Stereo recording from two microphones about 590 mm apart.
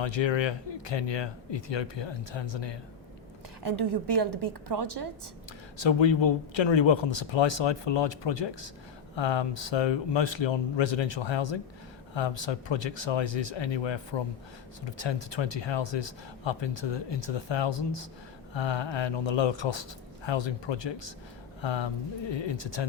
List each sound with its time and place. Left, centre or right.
0.0 s speech: left
3.6 s a woman's voice: right
5.7 s speech: left